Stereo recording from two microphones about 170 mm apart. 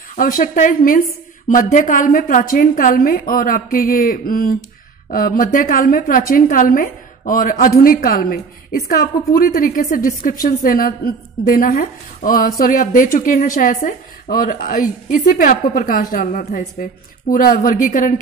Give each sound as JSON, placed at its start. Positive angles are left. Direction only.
{"t": 0.1, "sound": "a woman's voice", "side_deg": 55}